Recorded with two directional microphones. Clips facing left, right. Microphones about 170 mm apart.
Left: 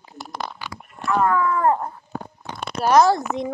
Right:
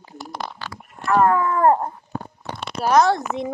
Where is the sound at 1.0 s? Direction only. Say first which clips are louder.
Right 3 dB; 60° right (ahead or behind).